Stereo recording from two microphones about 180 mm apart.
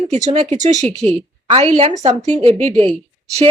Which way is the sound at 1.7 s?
35° right (ahead or behind).